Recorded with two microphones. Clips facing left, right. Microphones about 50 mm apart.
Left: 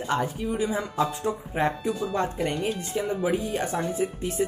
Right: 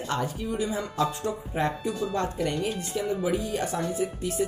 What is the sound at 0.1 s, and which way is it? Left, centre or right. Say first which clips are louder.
Speech: left 3 dB; left.